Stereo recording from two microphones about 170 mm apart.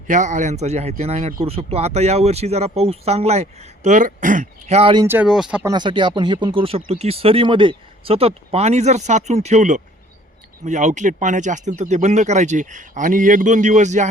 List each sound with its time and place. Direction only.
0.1 s speech: 45° right (ahead or behind)
5.0 s speech: 10° right (ahead or behind)
5.6 s speech: 25° right (ahead or behind); by 14.1 s 45° right (ahead or behind)